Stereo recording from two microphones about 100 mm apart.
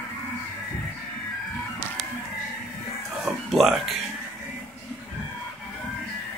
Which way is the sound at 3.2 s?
Centre (ahead or behind).